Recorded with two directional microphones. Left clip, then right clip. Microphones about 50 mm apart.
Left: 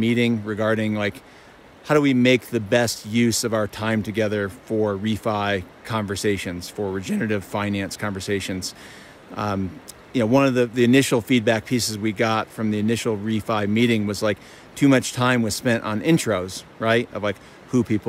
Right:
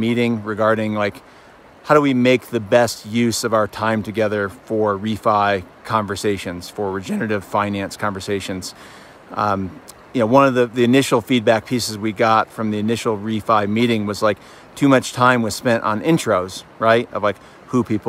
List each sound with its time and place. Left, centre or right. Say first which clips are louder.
0.0 s speech: right 2 dB; left